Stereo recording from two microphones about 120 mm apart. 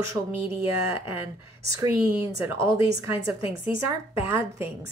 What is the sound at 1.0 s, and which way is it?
Speech, 20° right (ahead or behind).